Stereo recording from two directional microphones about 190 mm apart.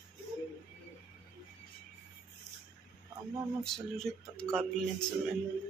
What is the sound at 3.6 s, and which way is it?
Speech, centre (ahead or behind).